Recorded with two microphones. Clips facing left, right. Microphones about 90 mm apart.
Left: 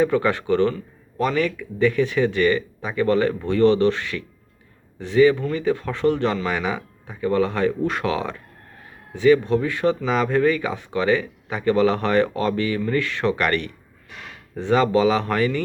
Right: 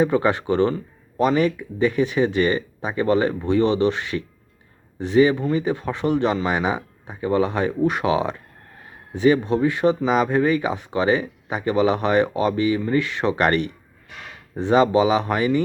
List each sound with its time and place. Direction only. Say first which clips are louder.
0.0 s speech: right 1 dB; 20° right (ahead or behind)